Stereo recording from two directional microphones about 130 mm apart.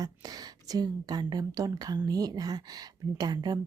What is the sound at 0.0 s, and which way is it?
A woman's voice, 30° right (ahead or behind).